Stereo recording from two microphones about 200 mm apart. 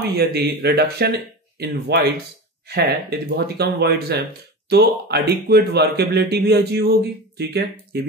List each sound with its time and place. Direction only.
0.0 s speech: 55° right (ahead or behind)